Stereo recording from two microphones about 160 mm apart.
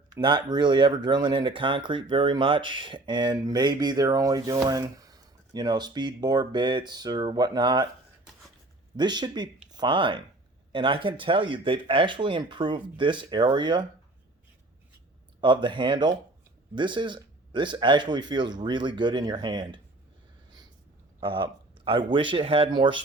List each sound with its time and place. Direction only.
0.1 s speech: 30° right (ahead or behind)
9.0 s speech: 25° right (ahead or behind)
15.4 s speech: 30° right (ahead or behind)
21.2 s speech: 30° right (ahead or behind)